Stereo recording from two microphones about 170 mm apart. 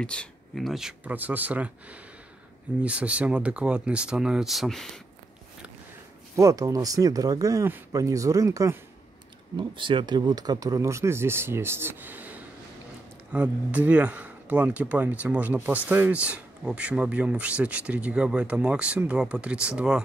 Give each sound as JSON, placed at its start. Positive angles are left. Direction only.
{"t": 0.0, "sound": "speech", "side_deg": 5}
{"t": 6.3, "sound": "speech", "side_deg": -20}
{"t": 9.6, "sound": "speech", "side_deg": -30}